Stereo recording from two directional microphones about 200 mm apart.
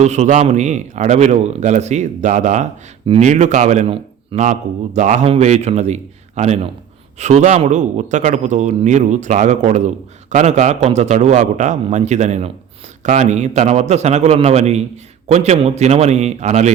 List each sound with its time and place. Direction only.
0.0 s speech: 35° right (ahead or behind)